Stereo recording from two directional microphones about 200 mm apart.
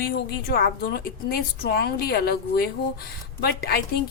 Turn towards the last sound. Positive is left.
turn(degrees=50)  # may be behind; listen again after turning